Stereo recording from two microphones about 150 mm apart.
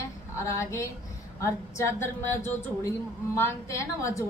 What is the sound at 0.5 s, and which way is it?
A woman's voice, 20° left (ahead or behind).